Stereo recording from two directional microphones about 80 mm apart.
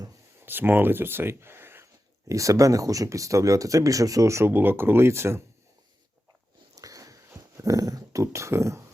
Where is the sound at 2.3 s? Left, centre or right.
Right.